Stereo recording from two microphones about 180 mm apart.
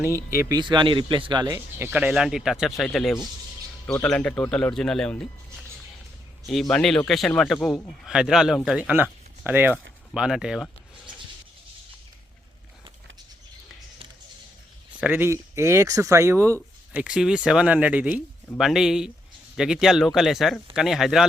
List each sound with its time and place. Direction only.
0.3 s speech: 15° right (ahead or behind)
1.8 s speech: 5° right (ahead or behind)
6.4 s speech: centre (ahead or behind)
15.0 s speech: 10° right (ahead or behind)